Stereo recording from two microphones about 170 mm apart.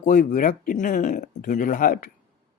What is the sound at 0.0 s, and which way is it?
Speech, 50° left (ahead or behind).